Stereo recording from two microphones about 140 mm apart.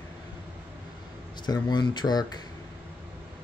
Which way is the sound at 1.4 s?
30° left (ahead or behind).